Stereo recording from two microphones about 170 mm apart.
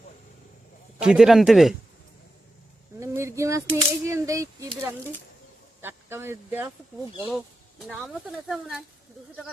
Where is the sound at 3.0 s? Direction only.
15° right (ahead or behind).